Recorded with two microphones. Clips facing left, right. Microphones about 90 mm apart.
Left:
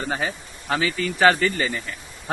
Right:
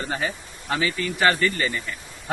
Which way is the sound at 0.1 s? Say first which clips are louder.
Left 1 dB; 35° left (ahead or behind).